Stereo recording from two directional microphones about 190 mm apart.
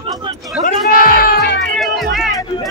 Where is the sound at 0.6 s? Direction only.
50° left (ahead or behind).